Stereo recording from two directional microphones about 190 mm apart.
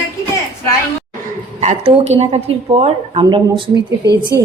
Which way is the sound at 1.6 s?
35° right (ahead or behind).